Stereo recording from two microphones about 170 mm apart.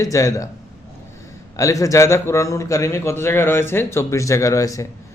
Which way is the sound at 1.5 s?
20° left (ahead or behind).